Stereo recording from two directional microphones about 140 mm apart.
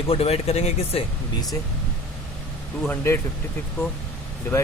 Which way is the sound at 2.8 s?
20° left (ahead or behind).